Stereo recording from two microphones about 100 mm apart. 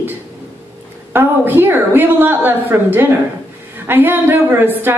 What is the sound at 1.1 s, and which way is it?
A woman's voice, 20° right (ahead or behind).